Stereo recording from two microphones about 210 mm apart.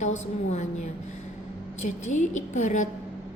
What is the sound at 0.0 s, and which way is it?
Speech, 35° left (ahead or behind).